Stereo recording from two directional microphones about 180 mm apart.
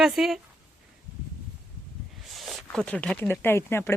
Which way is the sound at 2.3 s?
Centre (ahead or behind).